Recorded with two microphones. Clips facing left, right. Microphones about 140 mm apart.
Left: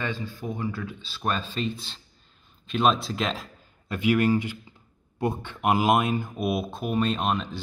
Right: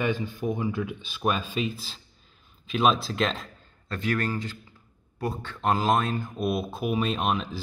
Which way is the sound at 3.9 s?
15° left (ahead or behind).